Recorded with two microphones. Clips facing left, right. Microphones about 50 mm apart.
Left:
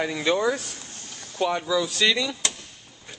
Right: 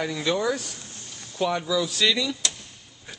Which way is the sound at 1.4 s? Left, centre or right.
Centre.